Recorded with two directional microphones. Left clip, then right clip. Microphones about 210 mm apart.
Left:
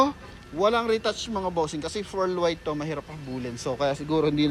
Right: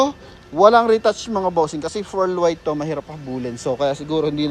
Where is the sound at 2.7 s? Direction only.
30° right (ahead or behind).